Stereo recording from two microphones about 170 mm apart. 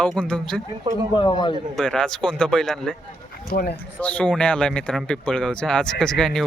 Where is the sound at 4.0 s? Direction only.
10° left (ahead or behind).